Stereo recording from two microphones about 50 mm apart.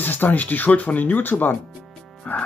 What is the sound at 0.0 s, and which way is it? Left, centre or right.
Speech, left.